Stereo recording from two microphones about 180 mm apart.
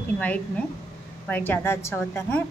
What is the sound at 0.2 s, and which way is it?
A woman's voice, 10° left (ahead or behind).